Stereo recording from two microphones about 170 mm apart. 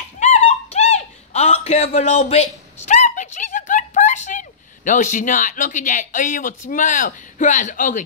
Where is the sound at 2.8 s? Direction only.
45° left (ahead or behind).